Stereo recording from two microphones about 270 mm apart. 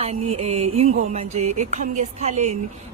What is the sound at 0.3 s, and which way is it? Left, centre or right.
A woman's voice, right.